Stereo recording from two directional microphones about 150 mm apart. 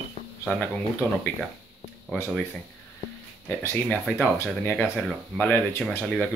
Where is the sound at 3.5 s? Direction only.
15° left (ahead or behind).